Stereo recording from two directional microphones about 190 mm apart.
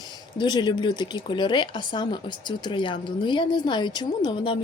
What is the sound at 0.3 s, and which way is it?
Speech, 25° left (ahead or behind).